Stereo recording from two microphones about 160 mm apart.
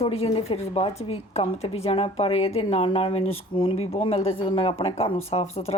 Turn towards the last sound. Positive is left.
turn(degrees=40)  # may be behind; listen again after turning